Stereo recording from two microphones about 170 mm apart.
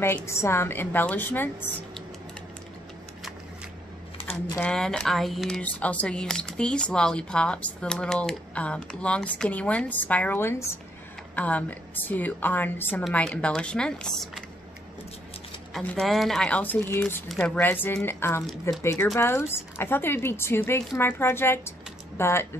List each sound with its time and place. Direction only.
0.0 s a woman's voice: 10° left (ahead or behind)
4.6 s a woman's voice: 5° left (ahead or behind)
15.7 s a woman's voice: 5° left (ahead or behind)